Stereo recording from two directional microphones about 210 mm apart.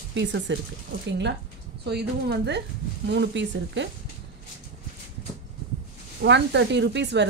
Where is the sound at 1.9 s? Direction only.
50° right (ahead or behind).